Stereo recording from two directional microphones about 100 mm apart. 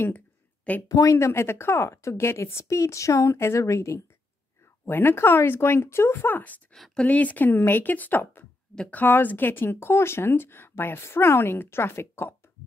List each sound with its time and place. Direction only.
0.8 s speech: 35° left (ahead or behind)
6.7 s speech: 10° left (ahead or behind)
8.7 s speech: 10° left (ahead or behind)
9.0 s speech: 20° left (ahead or behind)